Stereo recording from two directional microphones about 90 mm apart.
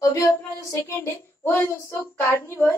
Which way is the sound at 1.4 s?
30° left (ahead or behind).